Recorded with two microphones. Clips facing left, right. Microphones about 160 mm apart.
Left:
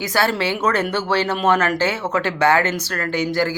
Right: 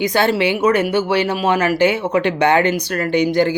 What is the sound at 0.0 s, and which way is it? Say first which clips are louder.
Speech: right 4 dB; 20° right (ahead or behind).